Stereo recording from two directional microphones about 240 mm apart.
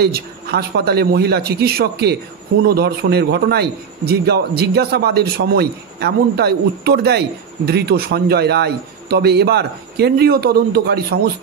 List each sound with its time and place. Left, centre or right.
0.0 s a man's voice: right